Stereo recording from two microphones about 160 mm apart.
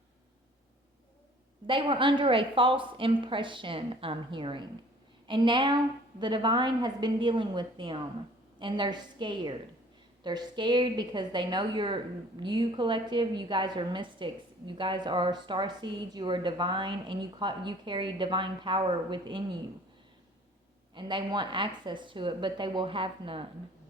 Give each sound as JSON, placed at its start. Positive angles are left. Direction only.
{"t": 1.6, "sound": "a woman's voice", "side_deg": -30}
{"t": 20.9, "sound": "a woman's voice", "side_deg": -30}